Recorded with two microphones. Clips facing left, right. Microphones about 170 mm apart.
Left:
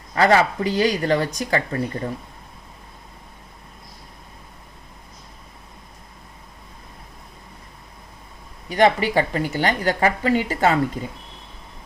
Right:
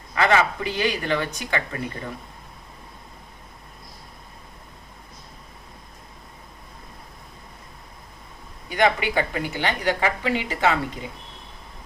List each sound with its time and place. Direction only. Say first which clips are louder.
0.1 s speech: left 3 dB; 35° left (ahead or behind)
8.7 s speech: left 4 dB; 35° left (ahead or behind)